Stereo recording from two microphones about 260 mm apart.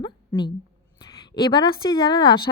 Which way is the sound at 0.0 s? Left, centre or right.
Centre.